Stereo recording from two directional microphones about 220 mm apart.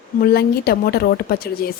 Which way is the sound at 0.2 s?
45° left (ahead or behind).